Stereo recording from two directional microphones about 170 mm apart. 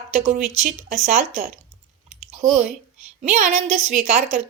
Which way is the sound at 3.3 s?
45° right (ahead or behind).